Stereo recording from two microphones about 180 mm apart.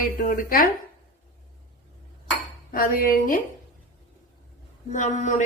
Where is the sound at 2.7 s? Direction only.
50° left (ahead or behind).